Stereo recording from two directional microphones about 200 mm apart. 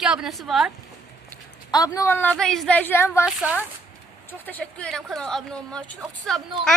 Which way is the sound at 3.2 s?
5° right (ahead or behind).